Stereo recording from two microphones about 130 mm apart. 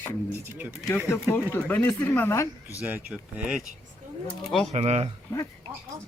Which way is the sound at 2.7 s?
10° right (ahead or behind).